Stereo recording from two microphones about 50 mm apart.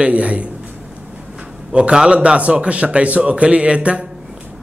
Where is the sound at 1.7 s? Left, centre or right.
Centre.